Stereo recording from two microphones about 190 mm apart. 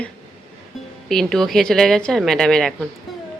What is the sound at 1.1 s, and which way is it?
A woman's voice, centre (ahead or behind).